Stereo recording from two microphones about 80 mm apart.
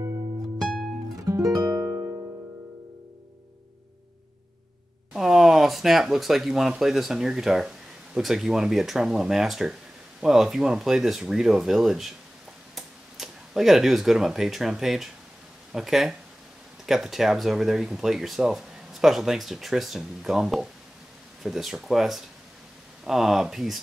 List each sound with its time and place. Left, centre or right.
0.6 s music: centre
1.1 s music: right
5.1 s speech: centre